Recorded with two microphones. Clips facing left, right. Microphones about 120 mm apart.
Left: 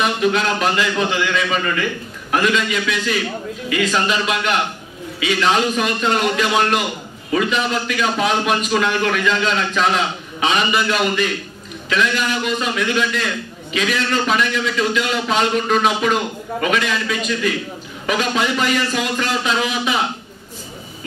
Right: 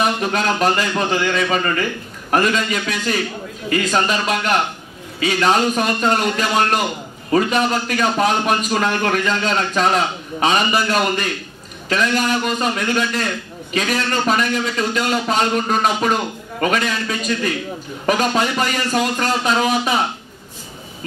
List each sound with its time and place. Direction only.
0.0 s a man's voice: 45° right (ahead or behind)